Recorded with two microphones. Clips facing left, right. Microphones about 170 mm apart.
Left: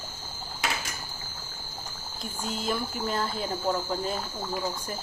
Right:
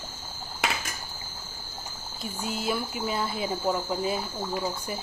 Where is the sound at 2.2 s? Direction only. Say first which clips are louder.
Right 1 dB; 5° right (ahead or behind).